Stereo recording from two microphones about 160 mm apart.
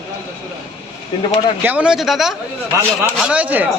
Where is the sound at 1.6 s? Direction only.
5° right (ahead or behind).